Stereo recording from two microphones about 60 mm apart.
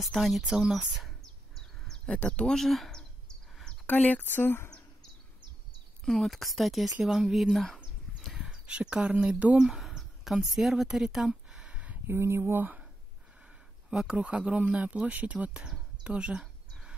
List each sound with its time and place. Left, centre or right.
0.0 s speech: centre
0.4 s speech: centre
0.7 s bird: centre
1.6 s a sound: centre
2.3 s speech: centre
2.9 s bird: centre
3.8 s speech: left
4.3 s speech: left
6.0 s speech: centre
8.3 s speech: centre
9.7 s speech: centre
12.1 s speech: right
13.8 s speech: centre